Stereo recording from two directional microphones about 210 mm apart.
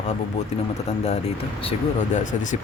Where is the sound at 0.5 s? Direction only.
30° left (ahead or behind).